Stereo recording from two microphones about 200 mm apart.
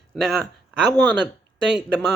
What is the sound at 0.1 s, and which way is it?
Speech, centre (ahead or behind).